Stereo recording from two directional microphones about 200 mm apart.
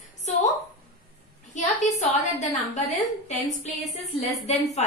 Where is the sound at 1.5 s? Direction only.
35° left (ahead or behind).